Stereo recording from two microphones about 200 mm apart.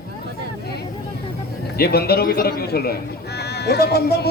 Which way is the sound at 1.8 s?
50° left (ahead or behind).